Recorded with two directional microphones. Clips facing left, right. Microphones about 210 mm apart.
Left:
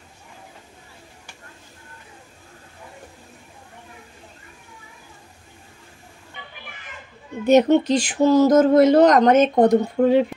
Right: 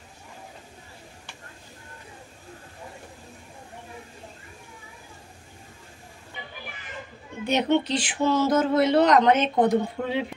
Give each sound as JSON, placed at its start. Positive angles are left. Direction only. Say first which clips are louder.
{"t": 7.4, "sound": "speech", "louder": "left 8 dB", "side_deg": 45}